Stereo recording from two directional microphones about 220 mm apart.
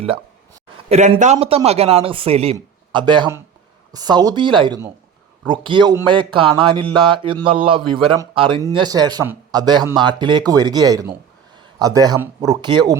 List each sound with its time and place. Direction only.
0.9 s a man's voice: 30° right (ahead or behind)